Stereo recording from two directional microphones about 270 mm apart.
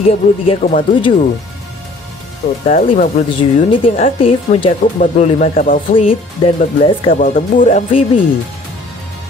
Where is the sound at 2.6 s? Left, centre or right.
Left.